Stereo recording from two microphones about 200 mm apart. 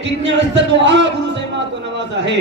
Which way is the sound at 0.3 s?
65° right (ahead or behind).